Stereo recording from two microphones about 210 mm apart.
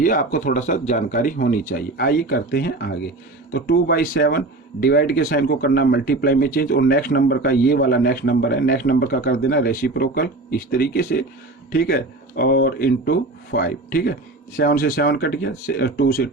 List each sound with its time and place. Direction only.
0.0 s speech: 40° left (ahead or behind)